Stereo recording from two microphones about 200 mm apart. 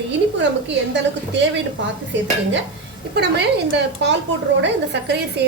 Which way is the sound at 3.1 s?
60° right (ahead or behind).